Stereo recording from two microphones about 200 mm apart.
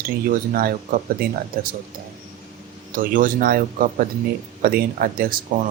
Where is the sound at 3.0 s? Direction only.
40° right (ahead or behind).